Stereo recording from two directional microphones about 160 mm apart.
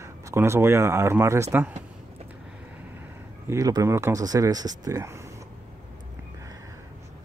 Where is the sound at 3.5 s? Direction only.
20° right (ahead or behind).